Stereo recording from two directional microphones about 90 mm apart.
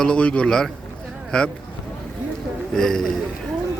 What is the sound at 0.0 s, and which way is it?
A man's voice, 10° left (ahead or behind).